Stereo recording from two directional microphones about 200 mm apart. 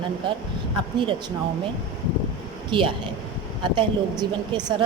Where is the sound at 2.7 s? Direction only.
25° right (ahead or behind).